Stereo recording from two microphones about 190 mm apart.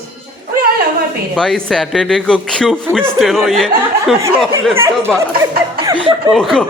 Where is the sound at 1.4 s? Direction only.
5° left (ahead or behind).